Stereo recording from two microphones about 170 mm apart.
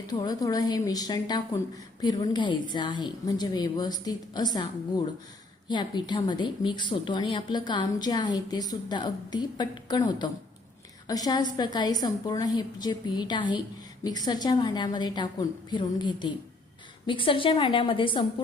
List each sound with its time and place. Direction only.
0.1 s a woman's voice: 25° left (ahead or behind)